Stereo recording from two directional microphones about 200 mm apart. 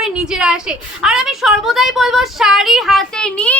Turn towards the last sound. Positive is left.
turn(degrees=5)  # may be behind; listen again after turning